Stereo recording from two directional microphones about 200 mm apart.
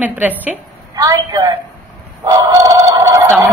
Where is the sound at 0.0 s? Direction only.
10° right (ahead or behind).